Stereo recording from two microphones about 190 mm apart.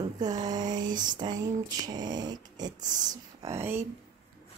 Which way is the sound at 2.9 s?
20° right (ahead or behind).